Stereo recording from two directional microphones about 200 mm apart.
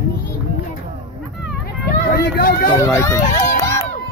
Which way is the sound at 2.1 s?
50° left (ahead or behind).